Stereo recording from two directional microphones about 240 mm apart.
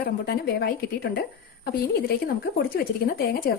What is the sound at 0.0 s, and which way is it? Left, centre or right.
Speech, left.